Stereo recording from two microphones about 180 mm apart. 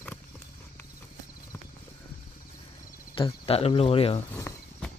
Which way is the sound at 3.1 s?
30° left (ahead or behind).